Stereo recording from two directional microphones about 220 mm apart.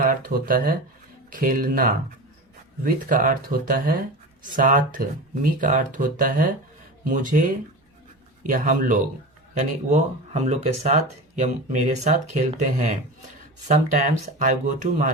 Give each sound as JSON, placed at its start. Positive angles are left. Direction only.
{"t": 0.0, "sound": "speech", "side_deg": -40}
{"t": 8.4, "sound": "speech", "side_deg": -40}